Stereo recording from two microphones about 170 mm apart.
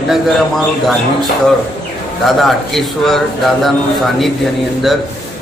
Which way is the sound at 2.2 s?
Centre (ahead or behind).